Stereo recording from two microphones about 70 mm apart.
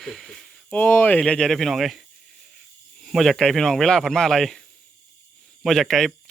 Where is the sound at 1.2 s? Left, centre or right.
Centre.